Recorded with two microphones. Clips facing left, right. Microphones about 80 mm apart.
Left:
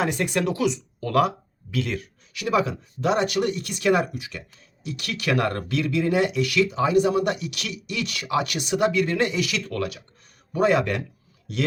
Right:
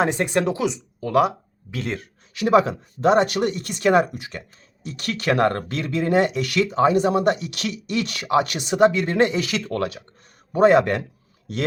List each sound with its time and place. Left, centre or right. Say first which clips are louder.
0.0 s speech: right 3 dB; right
1.8 s speech: right 1 dB; right